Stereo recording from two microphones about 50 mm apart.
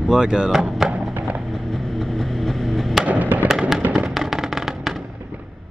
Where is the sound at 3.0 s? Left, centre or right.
Right.